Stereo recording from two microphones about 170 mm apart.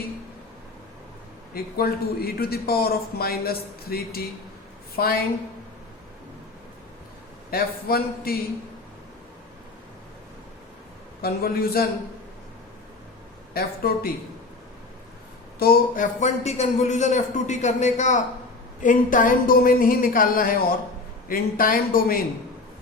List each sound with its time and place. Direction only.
1.5 s speech: 65° left (ahead or behind)
7.5 s speech: 60° left (ahead or behind)
11.2 s speech: 65° left (ahead or behind)
13.5 s speech: 60° left (ahead or behind)
15.5 s speech: 60° left (ahead or behind)
16.2 s a man's voice: 40° left (ahead or behind); by 22.2 s 60° left (ahead or behind)